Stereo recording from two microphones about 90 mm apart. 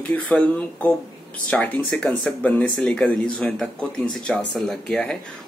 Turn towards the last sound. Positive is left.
turn(degrees=5)  # may be behind; listen again after turning